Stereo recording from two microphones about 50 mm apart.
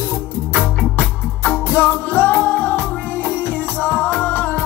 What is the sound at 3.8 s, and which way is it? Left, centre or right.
Music, left.